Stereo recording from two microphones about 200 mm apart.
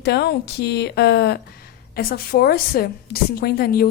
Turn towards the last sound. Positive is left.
turn(degrees=50)  # may be behind; listen again after turning